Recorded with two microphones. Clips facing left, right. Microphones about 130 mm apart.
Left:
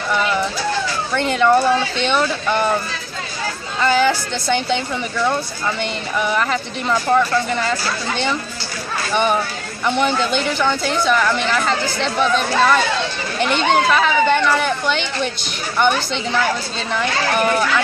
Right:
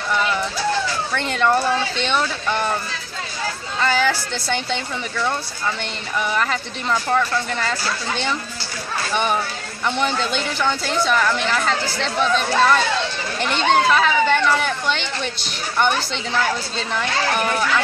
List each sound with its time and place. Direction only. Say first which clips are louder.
0.1 s a sound: left 2 dB; 5° left (ahead or behind)
1.1 s speech: left 5 dB; 5° left (ahead or behind)
3.8 s speech: left 4 dB; centre (ahead or behind)